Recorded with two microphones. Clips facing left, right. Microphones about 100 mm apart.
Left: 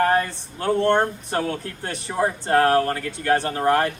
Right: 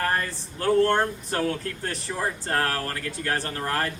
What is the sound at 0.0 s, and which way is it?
A man's voice, 30° left (ahead or behind).